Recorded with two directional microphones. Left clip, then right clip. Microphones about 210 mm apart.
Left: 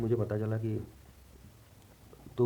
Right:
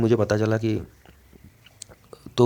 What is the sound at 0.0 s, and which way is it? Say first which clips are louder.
Speech: right 12 dB; 50° right (ahead or behind).